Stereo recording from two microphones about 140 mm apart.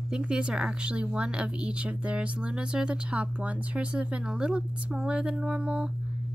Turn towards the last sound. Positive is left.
turn(degrees=-5)  # may be behind; listen again after turning